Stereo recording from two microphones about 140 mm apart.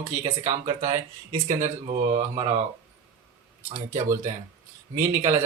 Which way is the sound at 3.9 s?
60° right (ahead or behind).